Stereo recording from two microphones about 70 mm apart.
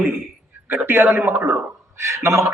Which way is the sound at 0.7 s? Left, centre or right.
Right.